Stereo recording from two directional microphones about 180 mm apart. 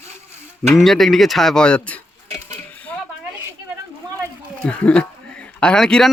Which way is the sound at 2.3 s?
15° left (ahead or behind).